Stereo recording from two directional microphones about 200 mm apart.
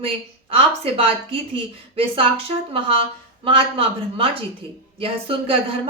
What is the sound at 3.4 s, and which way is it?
A woman's voice, 25° right (ahead or behind).